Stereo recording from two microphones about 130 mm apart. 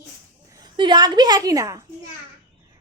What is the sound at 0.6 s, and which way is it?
A woman's voice, 35° right (ahead or behind).